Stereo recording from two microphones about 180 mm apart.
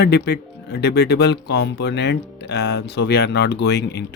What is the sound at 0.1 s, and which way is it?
Speech, 65° left (ahead or behind).